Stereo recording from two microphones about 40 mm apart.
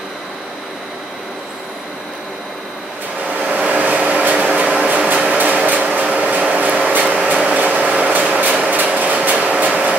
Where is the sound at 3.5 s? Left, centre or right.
Right.